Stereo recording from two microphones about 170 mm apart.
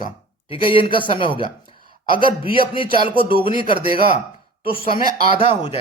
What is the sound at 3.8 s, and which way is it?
Speech, 60° right (ahead or behind).